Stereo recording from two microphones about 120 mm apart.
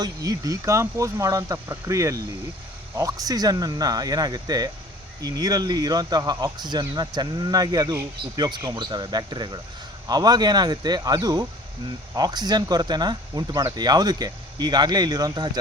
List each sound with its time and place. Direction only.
0.0 s speech: 30° right (ahead or behind)